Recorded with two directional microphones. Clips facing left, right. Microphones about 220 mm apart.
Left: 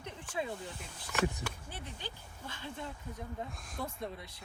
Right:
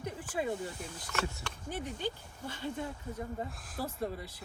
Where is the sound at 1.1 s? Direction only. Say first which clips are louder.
Left 4 dB; 15° left (ahead or behind).